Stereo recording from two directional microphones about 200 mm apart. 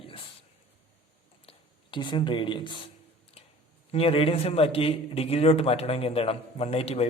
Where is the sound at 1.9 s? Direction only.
25° left (ahead or behind).